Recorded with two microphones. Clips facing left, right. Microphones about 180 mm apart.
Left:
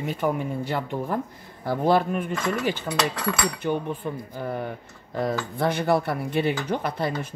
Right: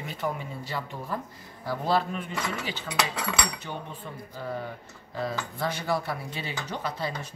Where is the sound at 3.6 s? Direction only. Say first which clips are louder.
Left 11 dB; 55° left (ahead or behind).